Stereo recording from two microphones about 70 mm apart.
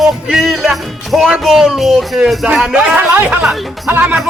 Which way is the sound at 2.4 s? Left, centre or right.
Centre.